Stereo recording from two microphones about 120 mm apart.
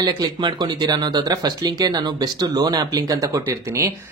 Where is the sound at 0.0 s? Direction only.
35° right (ahead or behind).